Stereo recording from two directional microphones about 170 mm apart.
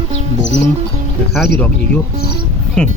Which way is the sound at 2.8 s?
10° left (ahead or behind).